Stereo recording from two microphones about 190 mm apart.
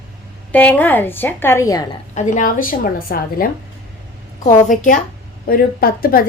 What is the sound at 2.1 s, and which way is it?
A woman's voice, 40° left (ahead or behind).